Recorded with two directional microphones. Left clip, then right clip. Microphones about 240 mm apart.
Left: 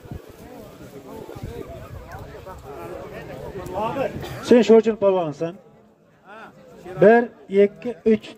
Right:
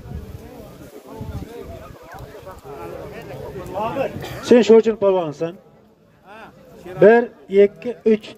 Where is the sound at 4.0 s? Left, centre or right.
Right.